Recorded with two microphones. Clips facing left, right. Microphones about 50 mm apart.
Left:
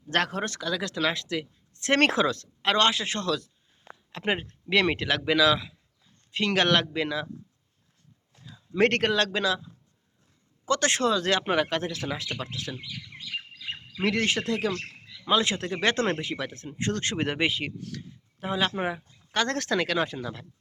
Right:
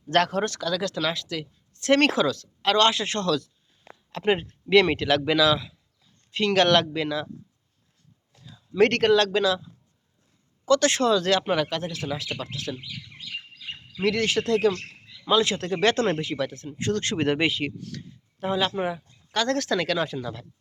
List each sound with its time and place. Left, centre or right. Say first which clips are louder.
0.1 s speech: right 5 dB; centre; by 2.5 s left
2.6 s speech: right 3 dB; left
2.9 s speech: right 3 dB; centre
8.4 s a sound: even; left
8.8 s speech: right 4 dB; centre
10.7 s speech: right 4 dB; left
11.7 s speech: even; left
12.4 s speech: right 2 dB; left
14.0 s speech: right 2 dB; left
19.7 s speech: right 1 dB; centre